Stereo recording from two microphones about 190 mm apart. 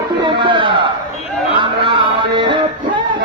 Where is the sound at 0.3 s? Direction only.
25° right (ahead or behind).